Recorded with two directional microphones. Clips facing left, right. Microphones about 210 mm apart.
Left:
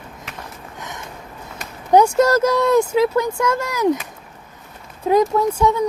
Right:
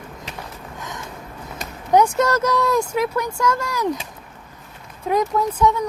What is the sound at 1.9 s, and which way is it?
Speech, 30° left (ahead or behind).